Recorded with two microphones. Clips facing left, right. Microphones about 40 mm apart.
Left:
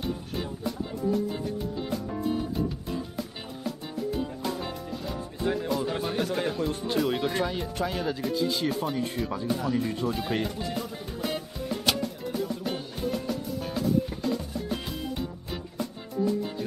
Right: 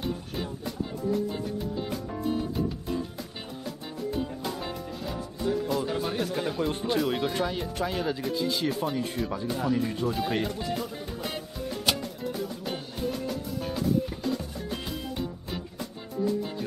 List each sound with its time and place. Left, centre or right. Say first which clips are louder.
0.9 s music: left 1 dB; centre
4.3 s music: left 1 dB; centre
5.4 s music: even; left
5.7 s music: even; centre
6.0 s speech: left 1 dB; centre
11.8 s music: even; centre